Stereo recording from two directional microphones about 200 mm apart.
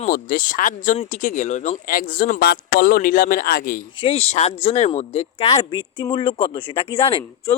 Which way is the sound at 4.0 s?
30° left (ahead or behind).